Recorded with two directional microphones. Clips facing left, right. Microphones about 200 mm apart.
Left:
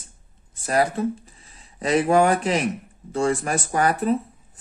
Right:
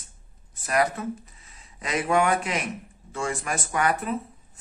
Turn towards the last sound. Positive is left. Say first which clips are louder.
# left 5 dB
turn(degrees=35)  # may be behind; listen again after turning